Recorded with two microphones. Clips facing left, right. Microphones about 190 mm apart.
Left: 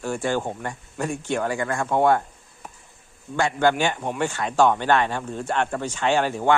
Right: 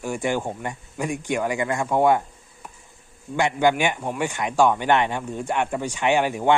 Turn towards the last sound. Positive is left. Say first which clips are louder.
# right 1 dB
turn(degrees=-15)  # may be behind; listen again after turning